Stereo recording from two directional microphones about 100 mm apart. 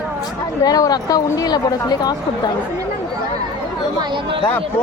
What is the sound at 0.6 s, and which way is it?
A woman's voice, 40° left (ahead or behind).